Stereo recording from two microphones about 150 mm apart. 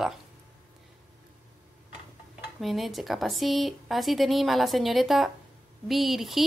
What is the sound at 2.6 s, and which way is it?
Speech, centre (ahead or behind).